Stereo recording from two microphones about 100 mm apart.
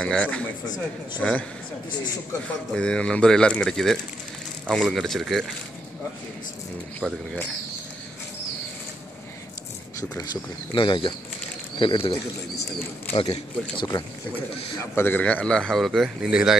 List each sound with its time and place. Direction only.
0.0 s a man's voice: 10° left (ahead or behind)
2.4 s a man's voice: 10° left (ahead or behind)
10.7 s speech: 60° left (ahead or behind)
11.8 s a man's voice: 65° left (ahead or behind)
13.9 s speech: 55° left (ahead or behind)
14.8 s a man's voice: 25° left (ahead or behind); by 16.5 s 10° right (ahead or behind)